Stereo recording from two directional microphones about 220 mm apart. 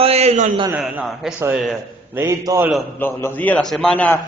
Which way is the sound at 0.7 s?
5° right (ahead or behind).